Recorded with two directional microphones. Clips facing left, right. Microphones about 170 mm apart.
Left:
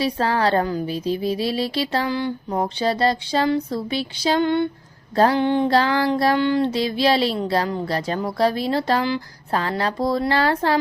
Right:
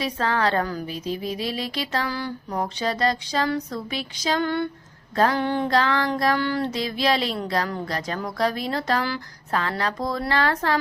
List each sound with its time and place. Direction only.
0.0 s speech: 35° left (ahead or behind)
5.1 s a sound: 30° left (ahead or behind)
7.3 s speech: 30° left (ahead or behind)